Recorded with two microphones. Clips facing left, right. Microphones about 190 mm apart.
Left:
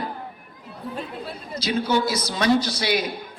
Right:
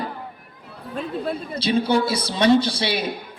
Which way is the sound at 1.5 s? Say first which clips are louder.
Right 2 dB; 30° right (ahead or behind).